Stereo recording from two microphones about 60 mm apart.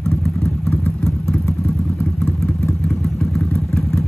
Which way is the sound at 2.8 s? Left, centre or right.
Centre.